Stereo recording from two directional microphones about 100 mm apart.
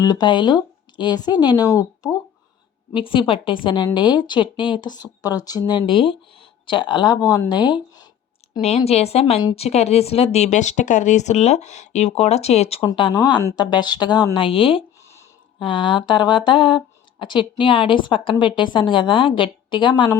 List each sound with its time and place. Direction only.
0.0 s speech: 45° left (ahead or behind)
2.9 s a woman's voice: 60° left (ahead or behind)
7.2 s speech: 35° left (ahead or behind)
8.6 s speech: 90° left
12.8 s speech: 55° left (ahead or behind)
14.3 s a woman's voice: 60° left (ahead or behind)